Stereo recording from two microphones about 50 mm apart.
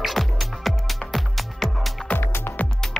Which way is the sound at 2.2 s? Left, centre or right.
Left.